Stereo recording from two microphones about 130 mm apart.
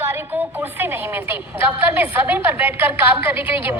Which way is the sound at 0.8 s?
15° right (ahead or behind).